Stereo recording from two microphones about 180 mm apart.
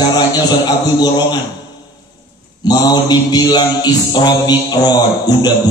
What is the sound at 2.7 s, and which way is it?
Music, 25° left (ahead or behind).